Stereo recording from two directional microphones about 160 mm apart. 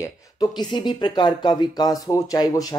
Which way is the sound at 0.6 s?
30° left (ahead or behind).